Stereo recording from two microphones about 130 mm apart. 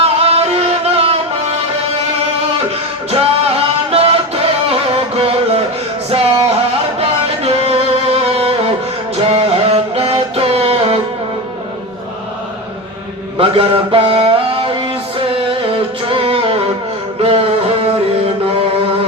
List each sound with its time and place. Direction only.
0.0 s music: 50° right (ahead or behind)
3.1 s music: 50° right (ahead or behind)
13.4 s mantra: 45° right (ahead or behind)
15.3 s music: 45° right (ahead or behind)